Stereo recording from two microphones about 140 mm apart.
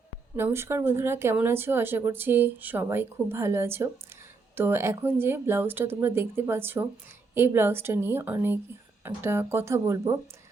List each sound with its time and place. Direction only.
0.3 s speech: 15° right (ahead or behind)